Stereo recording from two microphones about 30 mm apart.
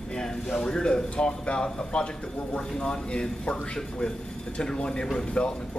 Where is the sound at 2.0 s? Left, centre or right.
Left.